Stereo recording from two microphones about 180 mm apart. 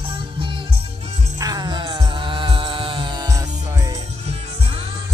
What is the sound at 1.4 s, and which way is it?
Music, 20° right (ahead or behind).